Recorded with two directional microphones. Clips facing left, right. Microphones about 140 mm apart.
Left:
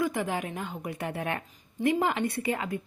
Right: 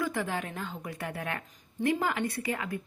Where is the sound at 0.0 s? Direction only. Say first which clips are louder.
Left 3 dB; 15° left (ahead or behind).